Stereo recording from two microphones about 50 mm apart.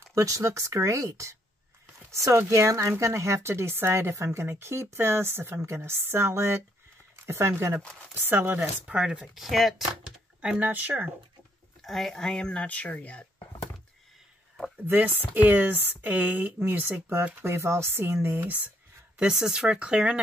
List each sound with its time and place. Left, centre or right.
0.1 s speech: right
2.0 s speech: right
8.3 s speech: right
8.8 s speech: centre
9.3 s speech: centre
10.6 s speech: right
11.8 s speech: centre; by 13.2 s left
14.9 s speech: right
17.4 s speech: right
18.4 s speech: right
19.1 s speech: centre